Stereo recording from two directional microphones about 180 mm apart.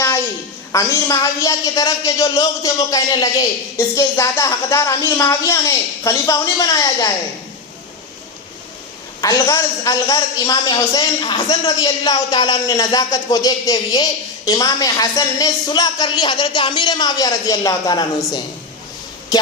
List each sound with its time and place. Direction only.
0.7 s a man's voice: 20° left (ahead or behind)
9.2 s a man's voice: 20° left (ahead or behind)
19.3 s music: 20° left (ahead or behind)